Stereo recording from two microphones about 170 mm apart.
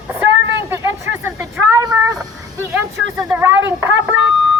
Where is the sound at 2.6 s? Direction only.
10° right (ahead or behind).